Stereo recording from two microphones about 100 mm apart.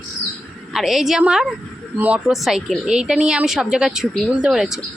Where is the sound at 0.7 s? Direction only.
Centre (ahead or behind).